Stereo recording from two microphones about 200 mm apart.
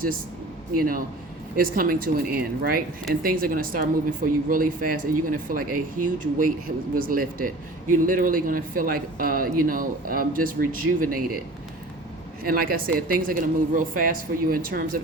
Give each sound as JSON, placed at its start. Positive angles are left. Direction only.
{"t": 0.8, "sound": "speech", "side_deg": -45}